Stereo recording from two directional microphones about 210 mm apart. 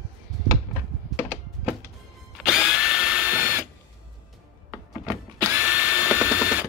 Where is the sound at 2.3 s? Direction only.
Centre (ahead or behind).